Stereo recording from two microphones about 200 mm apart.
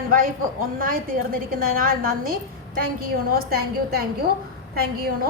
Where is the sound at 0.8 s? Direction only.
45° right (ahead or behind).